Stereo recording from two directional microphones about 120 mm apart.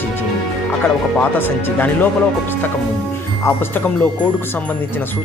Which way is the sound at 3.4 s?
20° left (ahead or behind).